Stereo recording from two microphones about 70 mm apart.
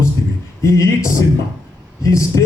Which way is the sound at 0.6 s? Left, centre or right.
Left.